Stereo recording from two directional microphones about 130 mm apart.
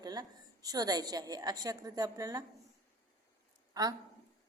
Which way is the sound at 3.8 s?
30° right (ahead or behind).